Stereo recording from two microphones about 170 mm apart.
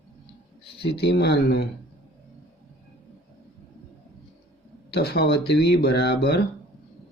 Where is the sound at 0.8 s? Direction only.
80° left.